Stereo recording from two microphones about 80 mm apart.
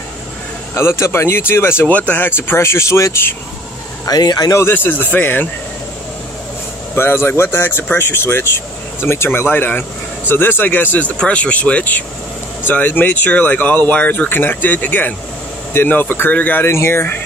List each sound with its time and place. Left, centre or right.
0.7 s speech: left
1.9 s speech: centre; by 3.3 s left
4.0 s speech: left
4.6 s speech: left
7.0 s speech: left